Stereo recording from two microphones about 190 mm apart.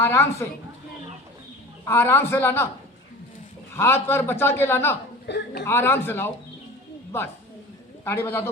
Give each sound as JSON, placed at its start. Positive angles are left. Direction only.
{"t": 0.0, "sound": "a man's voice", "side_deg": 15}
{"t": 1.8, "sound": "a man's voice", "side_deg": 10}
{"t": 3.8, "sound": "a man's voice", "side_deg": 10}
{"t": 5.2, "sound": "speech", "side_deg": 55}
{"t": 5.6, "sound": "a man's voice", "side_deg": 10}
{"t": 8.0, "sound": "a man's voice", "side_deg": 10}